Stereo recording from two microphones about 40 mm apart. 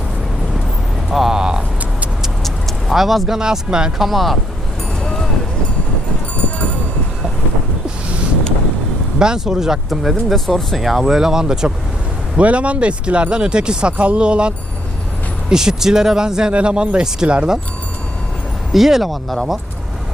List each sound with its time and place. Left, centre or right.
1.1 s a sound: centre
1.4 s a sound: right
2.9 s speech: centre
3.3 s speech: centre
3.9 s speech: centre
9.1 s speech: centre
12.4 s speech: right
13.9 s speech: right
15.4 s speech: centre
18.7 s speech: centre